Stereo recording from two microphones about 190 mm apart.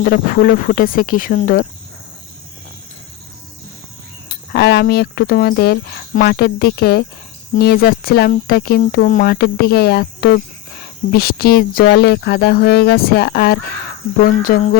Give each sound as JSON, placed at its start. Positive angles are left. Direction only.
{"t": 0.0, "sound": "speech", "side_deg": 50}
{"t": 4.5, "sound": "speech", "side_deg": 60}